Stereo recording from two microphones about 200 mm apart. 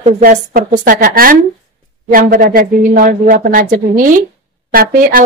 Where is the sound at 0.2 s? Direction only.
45° right (ahead or behind).